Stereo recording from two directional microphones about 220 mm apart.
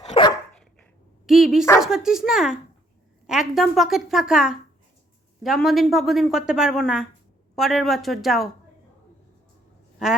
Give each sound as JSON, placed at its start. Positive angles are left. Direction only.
{"t": 0.0, "sound": "dog", "side_deg": 30}
{"t": 0.5, "sound": "dog", "side_deg": 5}
{"t": 1.3, "sound": "a woman's voice", "side_deg": 0}